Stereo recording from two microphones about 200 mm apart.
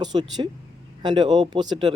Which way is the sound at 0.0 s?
20° right (ahead or behind).